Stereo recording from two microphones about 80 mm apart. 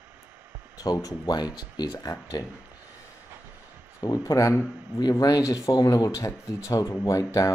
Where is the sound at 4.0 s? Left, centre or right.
Left.